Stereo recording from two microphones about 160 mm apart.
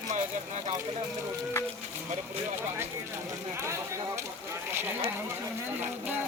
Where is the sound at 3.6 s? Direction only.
20° right (ahead or behind).